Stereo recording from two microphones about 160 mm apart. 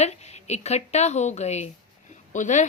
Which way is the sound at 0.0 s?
45° left (ahead or behind).